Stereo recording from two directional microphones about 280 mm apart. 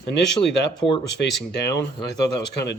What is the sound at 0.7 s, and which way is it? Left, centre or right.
Speech, centre.